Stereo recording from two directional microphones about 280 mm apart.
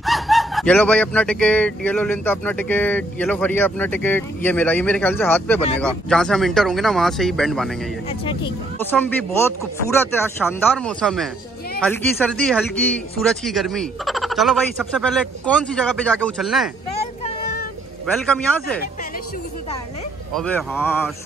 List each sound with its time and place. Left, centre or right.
0.0 s speech: centre
8.7 s a man's voice: centre
18.1 s speech: centre
20.3 s a man's voice: centre